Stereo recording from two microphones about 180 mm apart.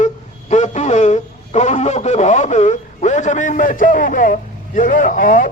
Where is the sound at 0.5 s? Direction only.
40° left (ahead or behind).